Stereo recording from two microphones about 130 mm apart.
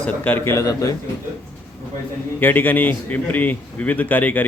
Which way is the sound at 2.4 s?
15° left (ahead or behind).